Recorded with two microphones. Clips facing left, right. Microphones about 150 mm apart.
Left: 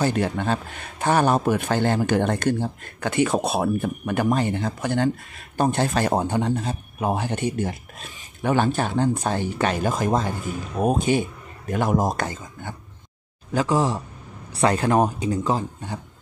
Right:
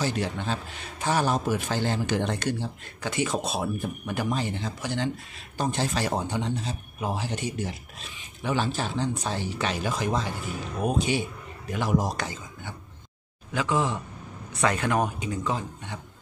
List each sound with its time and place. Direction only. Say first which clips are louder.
0.0 s a man's voice: left 6 dB; 55° left (ahead or behind)
13.5 s speech: left 5 dB; 40° left (ahead or behind)